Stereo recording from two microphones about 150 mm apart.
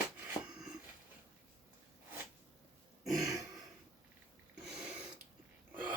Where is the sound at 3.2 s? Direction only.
20° right (ahead or behind).